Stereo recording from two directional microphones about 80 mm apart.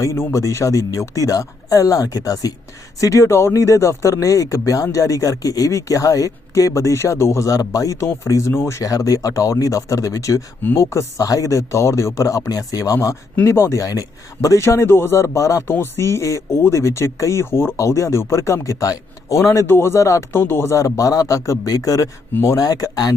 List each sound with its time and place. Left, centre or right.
0.0 s speech: left
8.8 s speech: left
13.4 s speech: left
14.6 s speech: left
20.3 s speech: left